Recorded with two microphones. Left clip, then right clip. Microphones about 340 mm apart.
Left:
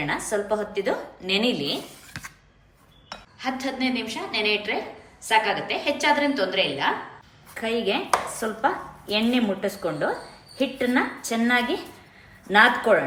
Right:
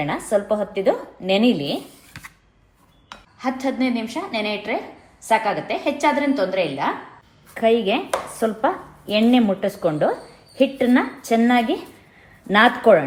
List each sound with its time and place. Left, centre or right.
0.1 s a woman's voice: centre
3.1 s dishes: centre
3.4 s a woman's voice: centre